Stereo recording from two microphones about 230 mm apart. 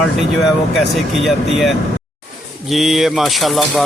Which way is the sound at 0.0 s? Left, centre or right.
Centre.